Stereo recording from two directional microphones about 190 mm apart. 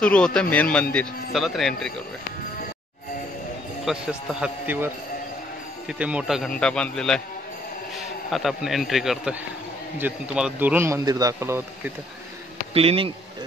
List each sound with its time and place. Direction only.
0.0 s a man's voice: 5° left (ahead or behind)
3.8 s a man's voice: 5° right (ahead or behind)
8.3 s a man's voice: centre (ahead or behind)
12.7 s speech: 30° right (ahead or behind)